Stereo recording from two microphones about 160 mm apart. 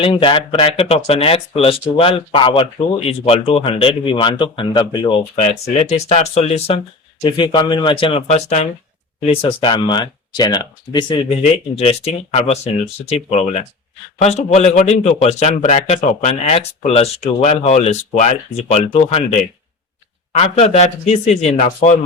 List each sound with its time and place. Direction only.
0.0 s speech: 35° left (ahead or behind)
11.8 s a man's voice: 40° left (ahead or behind)